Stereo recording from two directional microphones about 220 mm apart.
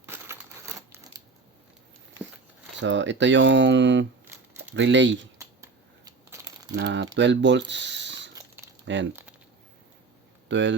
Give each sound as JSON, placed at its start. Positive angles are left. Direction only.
{"t": 0.0, "sound": "crumpling", "side_deg": -10}
{"t": 2.8, "sound": "speech", "side_deg": -55}
{"t": 4.3, "sound": "a sound", "side_deg": -10}
{"t": 4.7, "sound": "speech", "side_deg": -55}
{"t": 5.4, "sound": "scissors", "side_deg": -15}
{"t": 6.7, "sound": "speech", "side_deg": -55}
{"t": 8.4, "sound": "crumpling", "side_deg": -15}
{"t": 10.5, "sound": "speech", "side_deg": -55}